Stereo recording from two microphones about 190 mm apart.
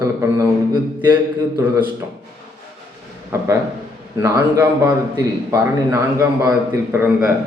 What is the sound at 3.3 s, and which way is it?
A man's voice, 15° right (ahead or behind).